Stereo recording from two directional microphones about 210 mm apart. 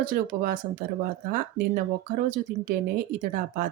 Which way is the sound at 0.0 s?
45° right (ahead or behind).